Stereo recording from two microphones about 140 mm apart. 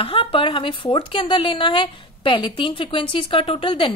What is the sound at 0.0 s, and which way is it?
A woman's voice, 40° left (ahead or behind).